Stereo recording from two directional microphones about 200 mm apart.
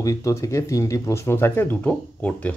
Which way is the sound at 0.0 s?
15° left (ahead or behind).